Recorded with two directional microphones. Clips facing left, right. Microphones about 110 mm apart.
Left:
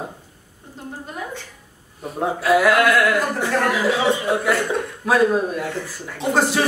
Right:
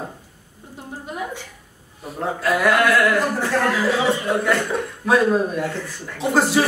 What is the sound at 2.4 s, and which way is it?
Speech, centre (ahead or behind).